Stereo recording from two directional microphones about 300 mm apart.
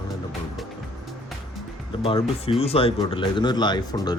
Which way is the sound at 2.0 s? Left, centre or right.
Centre.